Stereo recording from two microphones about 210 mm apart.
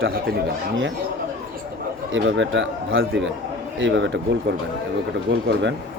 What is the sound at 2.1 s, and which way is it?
Speech, 60° right (ahead or behind).